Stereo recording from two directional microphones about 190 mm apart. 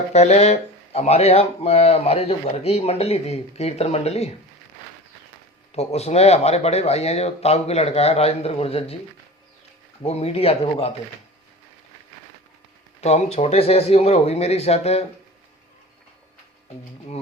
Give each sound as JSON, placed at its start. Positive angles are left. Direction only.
{"t": 0.1, "sound": "speech", "side_deg": 35}
{"t": 5.7, "sound": "speech", "side_deg": 35}
{"t": 10.0, "sound": "speech", "side_deg": 30}
{"t": 13.0, "sound": "speech", "side_deg": 35}